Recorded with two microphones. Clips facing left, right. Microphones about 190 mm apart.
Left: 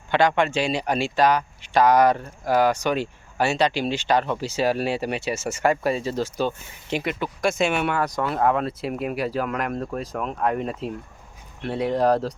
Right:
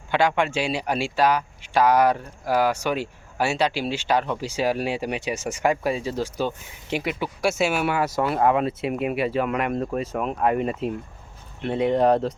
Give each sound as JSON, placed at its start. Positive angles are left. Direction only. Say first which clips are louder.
{"t": 0.1, "sound": "speech", "louder": "left 1 dB", "side_deg": -10}